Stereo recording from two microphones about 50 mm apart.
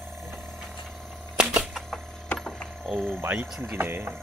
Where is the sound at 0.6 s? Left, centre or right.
Centre.